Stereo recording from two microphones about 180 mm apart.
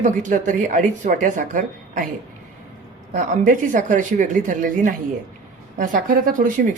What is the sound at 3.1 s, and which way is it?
Speech, 50° right (ahead or behind).